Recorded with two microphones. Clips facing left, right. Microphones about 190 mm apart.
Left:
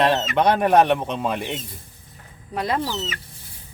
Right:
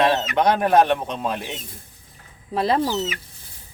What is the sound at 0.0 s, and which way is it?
Speech, centre (ahead or behind).